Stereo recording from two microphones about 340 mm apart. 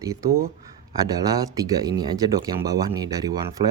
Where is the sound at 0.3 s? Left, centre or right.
Right.